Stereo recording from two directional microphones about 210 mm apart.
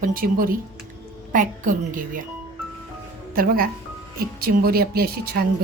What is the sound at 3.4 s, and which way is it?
Speech, 45° right (ahead or behind).